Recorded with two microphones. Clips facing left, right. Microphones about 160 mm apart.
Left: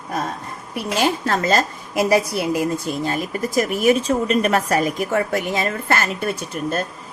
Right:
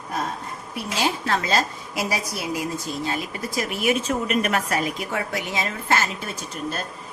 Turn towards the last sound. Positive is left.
turn(degrees=50)  # may be behind; listen again after turning